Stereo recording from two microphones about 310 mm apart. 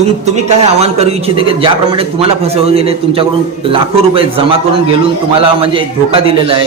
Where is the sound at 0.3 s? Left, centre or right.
Right.